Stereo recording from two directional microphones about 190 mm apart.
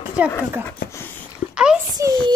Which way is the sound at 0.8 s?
15° left (ahead or behind).